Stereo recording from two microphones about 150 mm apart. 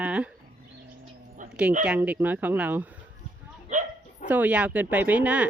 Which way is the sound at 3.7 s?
55° right (ahead or behind).